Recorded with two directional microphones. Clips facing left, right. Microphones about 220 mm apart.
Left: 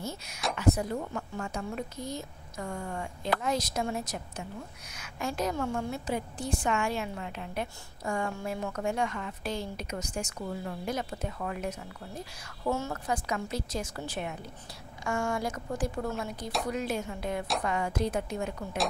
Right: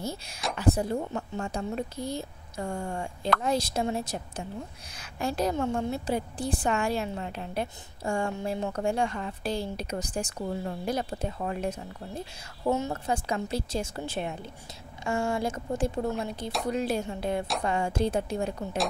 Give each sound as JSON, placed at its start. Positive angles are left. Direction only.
{"t": 0.0, "sound": "a woman's voice", "side_deg": -35}
{"t": 12.6, "sound": "a woman's voice", "side_deg": -20}